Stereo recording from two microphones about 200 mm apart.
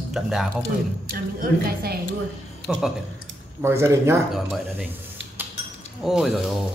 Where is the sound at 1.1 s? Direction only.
50° right (ahead or behind).